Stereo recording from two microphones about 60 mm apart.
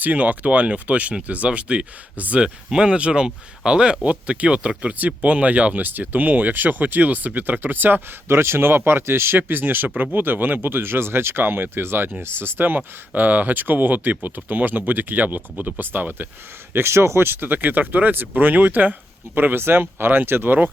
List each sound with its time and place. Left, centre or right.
0.0 s speech: right
8.3 s speech: right
16.7 s speech: right